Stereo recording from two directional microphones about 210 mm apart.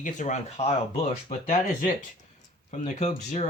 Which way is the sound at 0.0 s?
35° left (ahead or behind).